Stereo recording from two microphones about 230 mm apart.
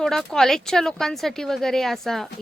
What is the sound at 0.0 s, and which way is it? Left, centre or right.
Speech, centre.